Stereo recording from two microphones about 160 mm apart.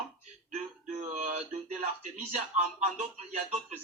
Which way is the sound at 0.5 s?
50° right (ahead or behind).